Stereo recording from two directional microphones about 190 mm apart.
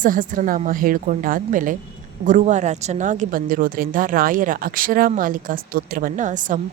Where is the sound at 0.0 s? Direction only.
45° right (ahead or behind).